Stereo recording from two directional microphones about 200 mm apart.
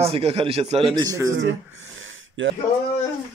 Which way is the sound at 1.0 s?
15° right (ahead or behind).